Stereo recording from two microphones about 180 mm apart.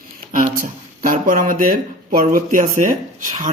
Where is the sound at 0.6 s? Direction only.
50° right (ahead or behind).